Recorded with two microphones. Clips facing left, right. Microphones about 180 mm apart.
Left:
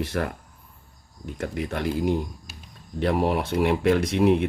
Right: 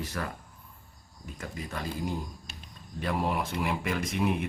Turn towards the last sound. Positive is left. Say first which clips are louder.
# left 9 dB
turn(degrees=70)  # may be behind; listen again after turning